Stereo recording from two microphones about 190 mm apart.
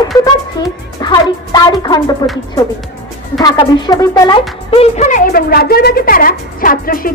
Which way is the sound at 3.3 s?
20° left (ahead or behind).